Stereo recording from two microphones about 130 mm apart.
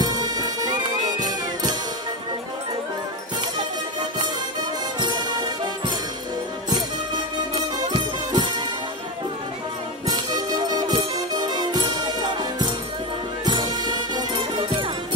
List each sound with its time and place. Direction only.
0.0 s music: 30° right (ahead or behind)
5.0 s music: 35° right (ahead or behind)
7.9 s music: 35° right (ahead or behind)
10.0 s music: 30° right (ahead or behind)